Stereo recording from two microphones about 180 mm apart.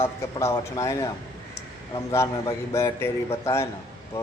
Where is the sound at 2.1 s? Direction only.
15° left (ahead or behind).